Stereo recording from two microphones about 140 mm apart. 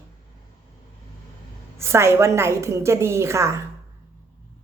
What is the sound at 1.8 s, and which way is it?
A woman's voice, 20° right (ahead or behind).